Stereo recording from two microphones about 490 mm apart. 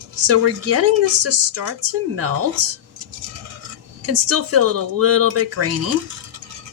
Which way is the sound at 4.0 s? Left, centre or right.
Right.